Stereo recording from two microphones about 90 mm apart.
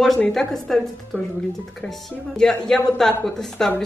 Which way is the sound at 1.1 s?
15° left (ahead or behind).